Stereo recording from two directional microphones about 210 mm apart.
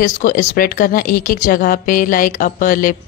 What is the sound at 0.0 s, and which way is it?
A woman's voice, 40° left (ahead or behind).